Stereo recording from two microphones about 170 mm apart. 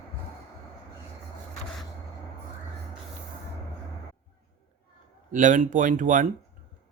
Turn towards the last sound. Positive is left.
turn(degrees=-50)  # may be behind; listen again after turning